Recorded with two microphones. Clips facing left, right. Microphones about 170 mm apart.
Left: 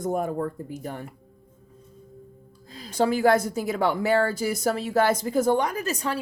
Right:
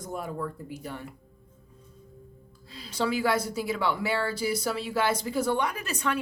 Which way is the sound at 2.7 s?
45° left (ahead or behind).